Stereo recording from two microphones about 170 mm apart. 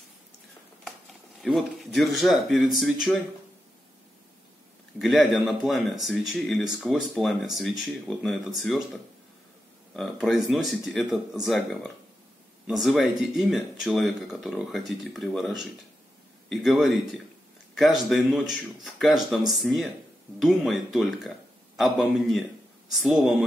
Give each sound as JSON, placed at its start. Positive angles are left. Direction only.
{"t": 1.4, "sound": "speech", "side_deg": 0}
{"t": 5.0, "sound": "speech", "side_deg": 0}
{"t": 10.2, "sound": "speech", "side_deg": 0}